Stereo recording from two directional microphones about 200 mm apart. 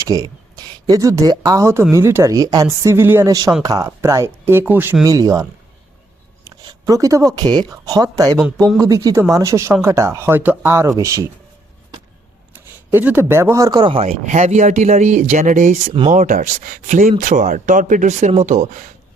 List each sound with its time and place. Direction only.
0.0 s speech: 15° right (ahead or behind)
6.6 s speech: 20° right (ahead or behind)
12.5 s speech: 10° right (ahead or behind); by 18.9 s 40° right (ahead or behind)